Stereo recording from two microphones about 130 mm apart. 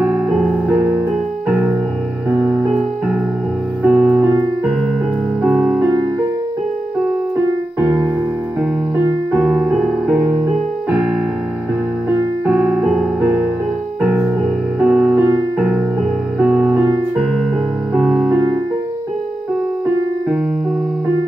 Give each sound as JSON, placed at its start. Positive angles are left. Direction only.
{"t": 0.0, "sound": "music", "side_deg": 0}
{"t": 3.8, "sound": "music", "side_deg": -10}
{"t": 5.4, "sound": "music", "side_deg": 0}
{"t": 7.8, "sound": "music", "side_deg": -20}
{"t": 9.3, "sound": "music", "side_deg": -5}
{"t": 12.4, "sound": "piano", "side_deg": -5}
{"t": 14.8, "sound": "music", "side_deg": 0}
{"t": 16.3, "sound": "music", "side_deg": 0}